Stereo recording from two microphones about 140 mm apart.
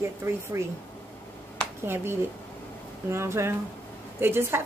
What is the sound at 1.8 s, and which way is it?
A woman's voice, 15° right (ahead or behind).